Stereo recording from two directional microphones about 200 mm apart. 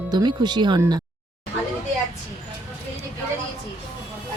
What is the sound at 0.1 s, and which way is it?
Speech, 20° right (ahead or behind).